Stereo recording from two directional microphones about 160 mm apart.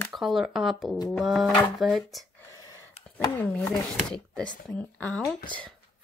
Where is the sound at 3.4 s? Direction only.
5° left (ahead or behind).